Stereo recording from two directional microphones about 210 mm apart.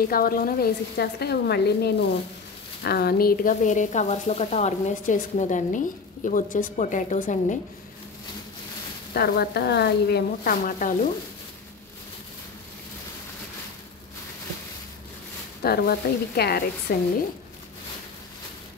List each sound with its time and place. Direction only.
0.1 s speech: 45° left (ahead or behind)
9.1 s speech: 45° left (ahead or behind)
15.6 s speech: 45° left (ahead or behind)